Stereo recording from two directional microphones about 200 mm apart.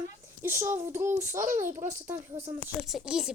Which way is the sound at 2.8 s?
Centre (ahead or behind).